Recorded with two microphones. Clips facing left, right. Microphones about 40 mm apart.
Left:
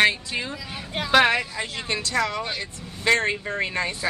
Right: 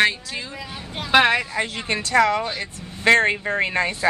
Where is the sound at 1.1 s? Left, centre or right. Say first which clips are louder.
Right 2 dB; centre.